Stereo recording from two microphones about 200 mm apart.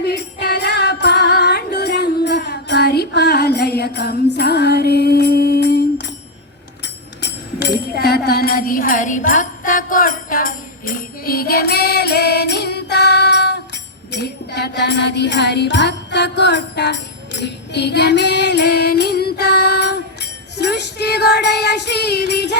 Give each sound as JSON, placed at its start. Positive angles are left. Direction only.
{"t": 0.0, "sound": "music", "side_deg": 55}
{"t": 6.8, "sound": "tambourine", "side_deg": 55}
{"t": 14.1, "sound": "music", "side_deg": 55}
{"t": 20.6, "sound": "female singing", "side_deg": 55}